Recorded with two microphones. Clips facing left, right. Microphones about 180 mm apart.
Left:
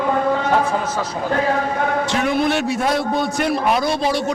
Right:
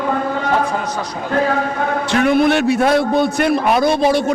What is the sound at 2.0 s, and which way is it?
A man's voice, 60° right (ahead or behind).